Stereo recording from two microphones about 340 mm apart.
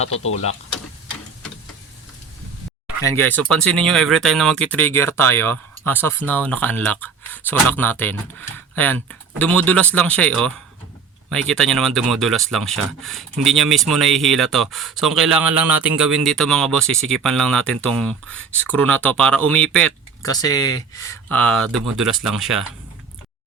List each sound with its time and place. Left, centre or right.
0.1 s speech: left
3.0 s speech: centre